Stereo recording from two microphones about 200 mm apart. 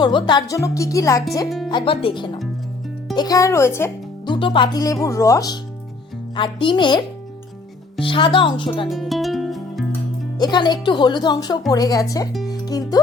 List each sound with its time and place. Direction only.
0.0 s speech: 20° left (ahead or behind)
1.5 s music: centre (ahead or behind)
1.7 s speech: 25° left (ahead or behind)
4.3 s speech: 25° left (ahead or behind)
8.0 s speech: 25° left (ahead or behind)
8.9 s music: centre (ahead or behind)
10.3 s speech: 20° left (ahead or behind)
12.5 s music: 20° left (ahead or behind)